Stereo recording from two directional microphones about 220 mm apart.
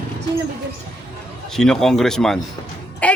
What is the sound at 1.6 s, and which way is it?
Speech, centre (ahead or behind).